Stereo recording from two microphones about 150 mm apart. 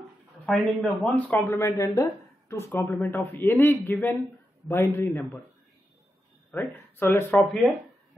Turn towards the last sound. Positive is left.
turn(degrees=0)  # may be behind; listen again after turning